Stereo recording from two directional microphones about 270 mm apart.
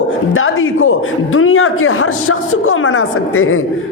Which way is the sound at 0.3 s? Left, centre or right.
Left.